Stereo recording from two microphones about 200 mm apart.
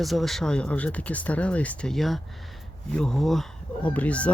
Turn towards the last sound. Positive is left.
turn(degrees=5)  # may be behind; listen again after turning